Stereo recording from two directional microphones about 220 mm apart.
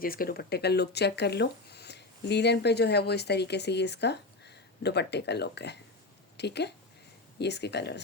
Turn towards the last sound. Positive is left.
turn(degrees=50)  # may be behind; listen again after turning